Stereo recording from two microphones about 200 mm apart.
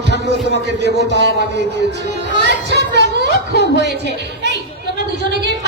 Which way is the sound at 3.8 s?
60° right (ahead or behind).